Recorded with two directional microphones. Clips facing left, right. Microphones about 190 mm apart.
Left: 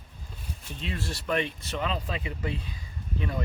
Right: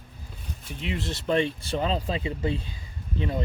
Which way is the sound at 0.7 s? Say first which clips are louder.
Right 3 dB; 15° right (ahead or behind).